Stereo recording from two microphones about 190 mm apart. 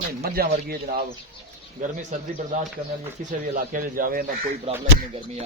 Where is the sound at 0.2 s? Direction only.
50° right (ahead or behind).